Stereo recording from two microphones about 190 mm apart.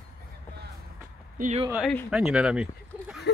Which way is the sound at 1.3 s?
45° right (ahead or behind).